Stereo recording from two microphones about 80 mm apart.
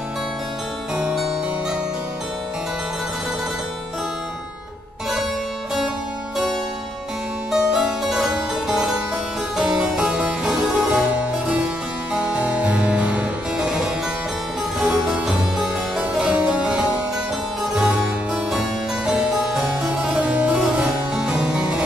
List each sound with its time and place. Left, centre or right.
7.5 s harpsichord: centre
16.0 s music: centre
17.7 s harpsichord: centre
19.0 s harpsichord: centre